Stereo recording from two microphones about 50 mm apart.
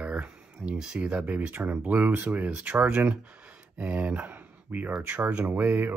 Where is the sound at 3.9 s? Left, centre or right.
Right.